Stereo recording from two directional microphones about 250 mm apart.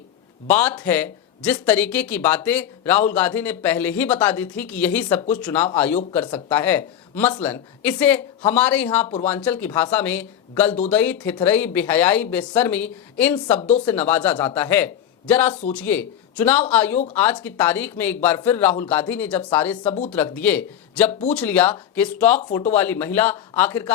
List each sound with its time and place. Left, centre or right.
0.4 s speech: centre
13.6 s speech: left
13.8 s speech: centre